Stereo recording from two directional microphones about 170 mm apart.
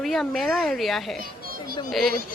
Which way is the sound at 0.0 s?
Centre (ahead or behind).